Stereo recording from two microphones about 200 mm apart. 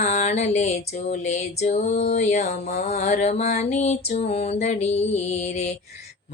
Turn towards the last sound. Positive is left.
turn(degrees=35)  # may be behind; listen again after turning